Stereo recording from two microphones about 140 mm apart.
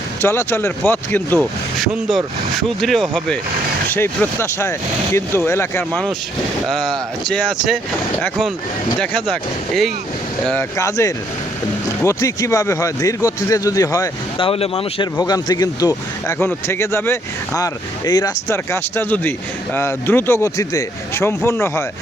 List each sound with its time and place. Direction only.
0.2 s speech: 15° left (ahead or behind)
1.8 s speech: centre (ahead or behind)
3.8 s speech: 15° left (ahead or behind)
7.3 s speech: centre (ahead or behind)
9.0 s speech: 5° left (ahead or behind)
10.8 s speech: 20° left (ahead or behind)
14.3 s speech: 40° left (ahead or behind)
15.2 s speech: 30° left (ahead or behind)